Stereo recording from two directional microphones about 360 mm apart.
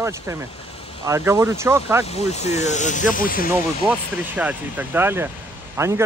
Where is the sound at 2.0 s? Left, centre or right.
Centre.